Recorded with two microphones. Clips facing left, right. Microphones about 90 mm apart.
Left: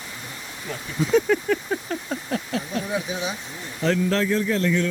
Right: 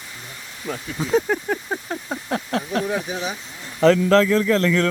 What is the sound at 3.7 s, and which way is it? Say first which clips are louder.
A man's voice: right 7 dB; 90° right.